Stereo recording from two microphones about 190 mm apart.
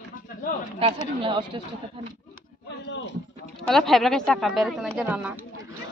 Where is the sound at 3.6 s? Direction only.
Centre (ahead or behind).